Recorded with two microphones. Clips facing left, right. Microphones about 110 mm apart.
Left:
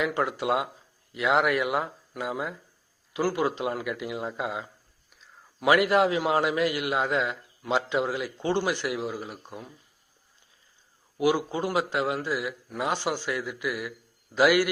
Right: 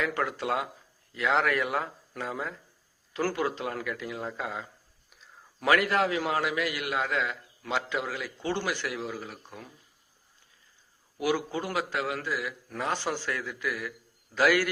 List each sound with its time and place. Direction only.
0.0 s a man's voice: 20° left (ahead or behind)
5.2 s a sound: centre (ahead or behind)
5.6 s a man's voice: 20° left (ahead or behind)
11.2 s a man's voice: 20° left (ahead or behind)